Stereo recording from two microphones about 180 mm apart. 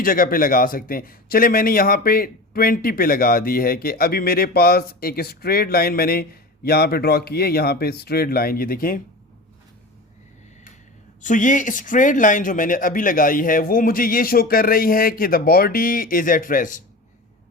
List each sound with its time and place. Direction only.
0.0 s a man's voice: 50° left (ahead or behind)
11.2 s speech: 45° left (ahead or behind)